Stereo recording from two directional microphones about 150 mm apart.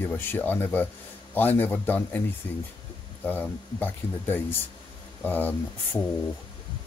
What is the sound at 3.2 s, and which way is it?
Speech, 10° left (ahead or behind).